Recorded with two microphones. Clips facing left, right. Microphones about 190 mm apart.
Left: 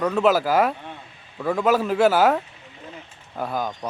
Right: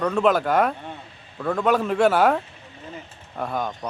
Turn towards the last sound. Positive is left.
turn(degrees=0)  # may be behind; listen again after turning